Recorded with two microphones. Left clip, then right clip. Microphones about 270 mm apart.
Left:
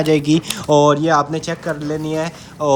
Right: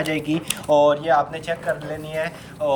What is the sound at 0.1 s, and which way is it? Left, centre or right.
Speech, left.